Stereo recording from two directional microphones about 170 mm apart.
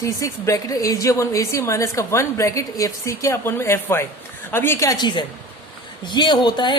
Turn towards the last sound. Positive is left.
turn(degrees=25)  # may be behind; listen again after turning